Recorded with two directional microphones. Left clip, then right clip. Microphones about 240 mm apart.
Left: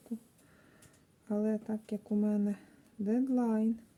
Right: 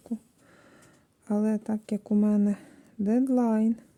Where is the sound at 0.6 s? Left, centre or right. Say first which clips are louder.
Right 8 dB; right.